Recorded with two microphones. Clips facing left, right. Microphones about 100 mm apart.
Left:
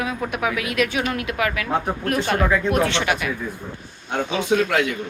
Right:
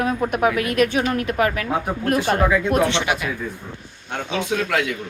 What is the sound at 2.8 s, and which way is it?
Speech, 20° right (ahead or behind).